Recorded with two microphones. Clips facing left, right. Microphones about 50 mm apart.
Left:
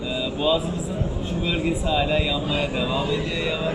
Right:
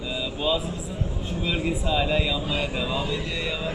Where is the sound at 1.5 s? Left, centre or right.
Left.